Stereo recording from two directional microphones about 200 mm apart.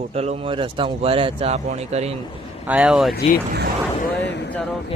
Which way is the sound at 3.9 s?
50° left (ahead or behind).